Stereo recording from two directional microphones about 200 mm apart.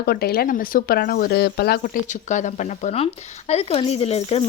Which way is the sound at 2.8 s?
30° left (ahead or behind).